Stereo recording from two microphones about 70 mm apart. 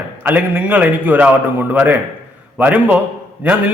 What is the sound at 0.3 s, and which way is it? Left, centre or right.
A man's voice, right.